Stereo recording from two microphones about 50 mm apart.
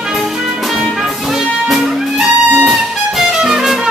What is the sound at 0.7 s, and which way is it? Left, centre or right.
Music, centre.